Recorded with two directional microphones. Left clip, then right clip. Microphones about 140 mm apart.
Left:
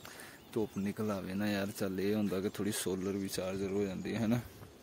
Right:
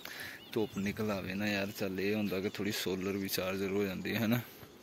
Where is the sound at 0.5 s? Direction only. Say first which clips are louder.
Right 1 dB; 10° left (ahead or behind); by 3.0 s 30° left (ahead or behind).